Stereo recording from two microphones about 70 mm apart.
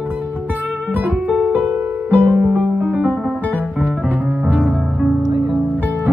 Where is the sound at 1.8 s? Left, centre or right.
Right.